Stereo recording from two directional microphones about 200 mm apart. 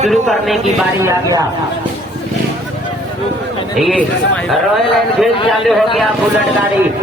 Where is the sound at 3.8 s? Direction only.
5° left (ahead or behind).